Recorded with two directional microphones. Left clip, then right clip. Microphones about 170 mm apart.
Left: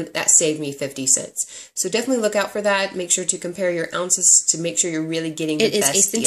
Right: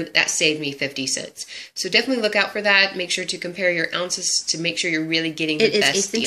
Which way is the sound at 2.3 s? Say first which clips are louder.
Right 2 dB; 40° left (ahead or behind).